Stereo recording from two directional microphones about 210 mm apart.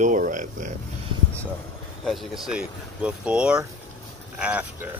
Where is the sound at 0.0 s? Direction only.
35° right (ahead or behind).